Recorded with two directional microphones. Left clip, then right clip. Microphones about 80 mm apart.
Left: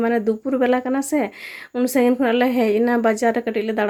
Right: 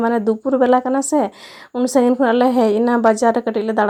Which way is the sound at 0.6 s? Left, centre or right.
Right.